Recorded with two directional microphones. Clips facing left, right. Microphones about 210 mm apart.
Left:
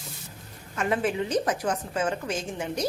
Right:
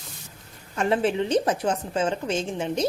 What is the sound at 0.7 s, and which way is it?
A woman's voice, 30° right (ahead or behind).